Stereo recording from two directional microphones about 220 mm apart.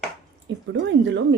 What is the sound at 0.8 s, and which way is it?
Speech, 55° right (ahead or behind).